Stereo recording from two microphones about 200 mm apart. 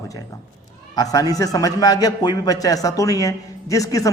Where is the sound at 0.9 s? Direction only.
20° left (ahead or behind).